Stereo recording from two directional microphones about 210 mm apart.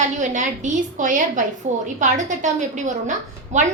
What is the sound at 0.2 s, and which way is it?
A woman's voice, 35° right (ahead or behind).